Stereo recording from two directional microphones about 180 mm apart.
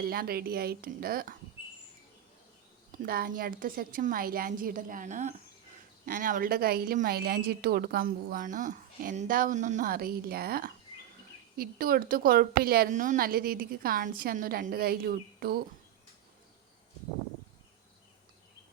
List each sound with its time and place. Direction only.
0.0 s a woman's voice: 55° right (ahead or behind)
3.0 s a woman's voice: 55° right (ahead or behind)